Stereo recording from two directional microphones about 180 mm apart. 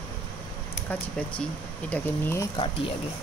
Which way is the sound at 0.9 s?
10° left (ahead or behind).